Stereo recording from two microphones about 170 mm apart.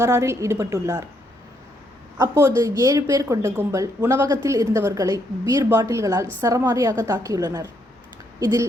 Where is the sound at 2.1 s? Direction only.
15° right (ahead or behind).